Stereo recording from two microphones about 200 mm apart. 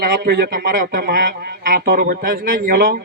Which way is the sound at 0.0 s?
55° right (ahead or behind).